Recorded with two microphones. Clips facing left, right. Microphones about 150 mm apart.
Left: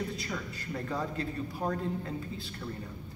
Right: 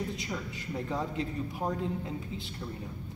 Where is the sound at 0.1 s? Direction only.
20° right (ahead or behind).